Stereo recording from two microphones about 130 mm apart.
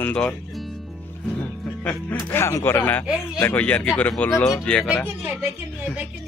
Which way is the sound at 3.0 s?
5° right (ahead or behind).